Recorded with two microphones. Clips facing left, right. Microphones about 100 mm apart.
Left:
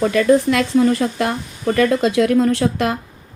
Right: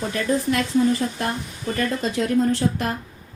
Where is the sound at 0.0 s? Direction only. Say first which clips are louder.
Left 9 dB; 90° left.